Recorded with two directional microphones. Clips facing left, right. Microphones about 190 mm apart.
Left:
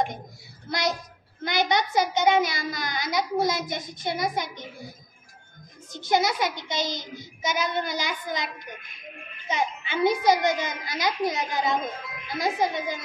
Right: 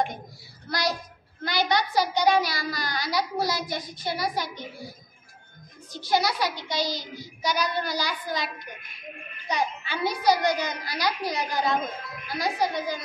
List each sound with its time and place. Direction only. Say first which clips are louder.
0.7 s a child's voice: left 1 dB; 20° left (ahead or behind)
6.0 s a child's voice: left 1 dB; 20° left (ahead or behind)
9.5 s a child's voice: even; 20° left (ahead or behind)